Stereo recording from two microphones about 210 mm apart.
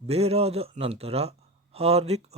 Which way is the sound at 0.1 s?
30° right (ahead or behind).